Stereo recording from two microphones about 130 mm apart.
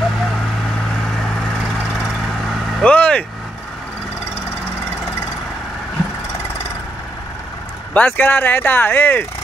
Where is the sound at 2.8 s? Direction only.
10° left (ahead or behind).